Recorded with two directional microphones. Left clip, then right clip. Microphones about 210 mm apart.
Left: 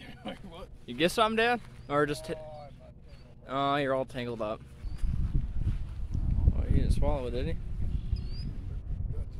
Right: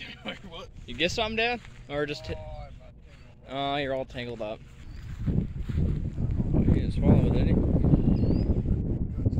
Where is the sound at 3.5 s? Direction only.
10° left (ahead or behind).